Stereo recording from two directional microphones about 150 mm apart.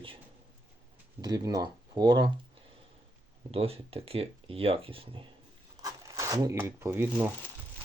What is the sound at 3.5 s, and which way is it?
Speech, 40° right (ahead or behind).